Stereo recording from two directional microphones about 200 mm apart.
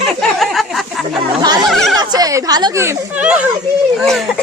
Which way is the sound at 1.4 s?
20° right (ahead or behind).